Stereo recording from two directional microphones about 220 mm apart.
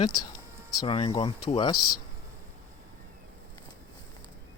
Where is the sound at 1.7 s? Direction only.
90° left.